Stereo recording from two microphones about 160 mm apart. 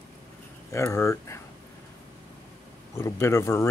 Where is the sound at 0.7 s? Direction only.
20° left (ahead or behind).